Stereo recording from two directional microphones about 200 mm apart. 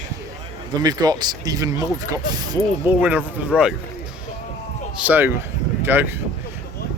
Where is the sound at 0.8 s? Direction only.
20° right (ahead or behind).